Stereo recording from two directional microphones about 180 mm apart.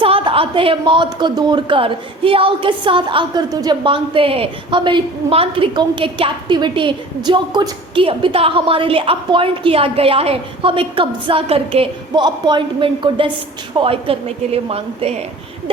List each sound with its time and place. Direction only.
0.0 s a woman's voice: 30° right (ahead or behind)